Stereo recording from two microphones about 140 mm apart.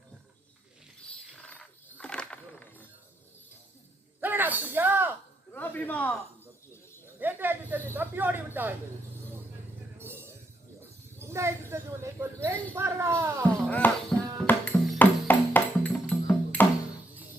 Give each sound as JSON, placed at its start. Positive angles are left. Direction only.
{"t": 1.4, "sound": "a sound", "side_deg": 5}
{"t": 4.2, "sound": "a sound", "side_deg": -15}
{"t": 5.5, "sound": "a man's voice", "side_deg": 10}
{"t": 7.2, "sound": "snake", "side_deg": -15}
{"t": 7.9, "sound": "speech", "side_deg": -15}
{"t": 10.0, "sound": "music", "side_deg": -15}
{"t": 11.2, "sound": "speech", "side_deg": -20}
{"t": 13.7, "sound": "music", "side_deg": 10}